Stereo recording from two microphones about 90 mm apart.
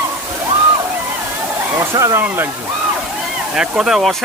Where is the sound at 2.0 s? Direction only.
30° right (ahead or behind).